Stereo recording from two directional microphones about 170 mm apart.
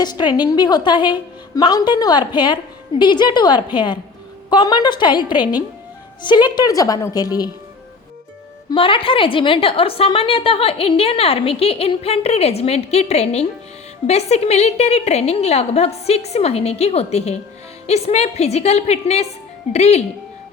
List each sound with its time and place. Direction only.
0.0 s a woman's voice: 25° left (ahead or behind)
8.7 s a woman's voice: 30° left (ahead or behind)